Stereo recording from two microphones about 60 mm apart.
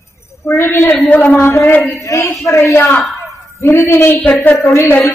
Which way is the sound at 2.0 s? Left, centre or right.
Left.